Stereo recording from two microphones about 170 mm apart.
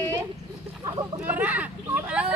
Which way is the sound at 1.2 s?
10° right (ahead or behind).